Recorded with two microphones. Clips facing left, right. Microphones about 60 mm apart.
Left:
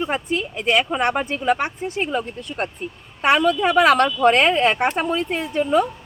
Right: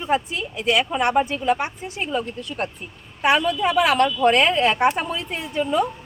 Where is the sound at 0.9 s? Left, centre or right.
Left.